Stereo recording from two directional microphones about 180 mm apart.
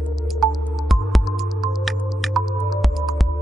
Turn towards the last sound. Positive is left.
turn(degrees=0)  # may be behind; listen again after turning